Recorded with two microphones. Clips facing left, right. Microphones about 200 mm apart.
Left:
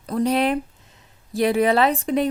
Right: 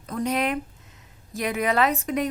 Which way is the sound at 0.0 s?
35° left (ahead or behind).